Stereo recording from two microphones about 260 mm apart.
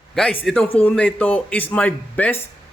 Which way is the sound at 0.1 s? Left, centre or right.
Centre.